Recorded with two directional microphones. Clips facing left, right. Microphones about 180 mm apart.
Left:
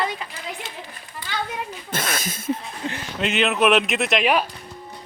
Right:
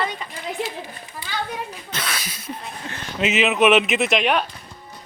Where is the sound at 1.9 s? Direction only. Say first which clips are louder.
Left 4 dB; 50° left (ahead or behind).